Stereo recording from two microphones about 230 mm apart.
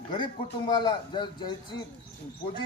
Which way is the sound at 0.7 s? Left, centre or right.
Centre.